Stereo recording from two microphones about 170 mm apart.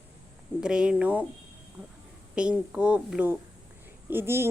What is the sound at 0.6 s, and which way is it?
Speech, 5° right (ahead or behind).